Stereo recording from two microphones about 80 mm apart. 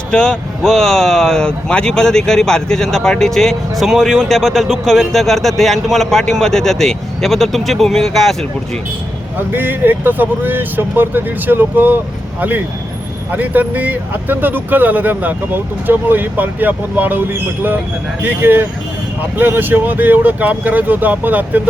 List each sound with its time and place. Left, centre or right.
0.1 s speech: centre
9.5 s speech: right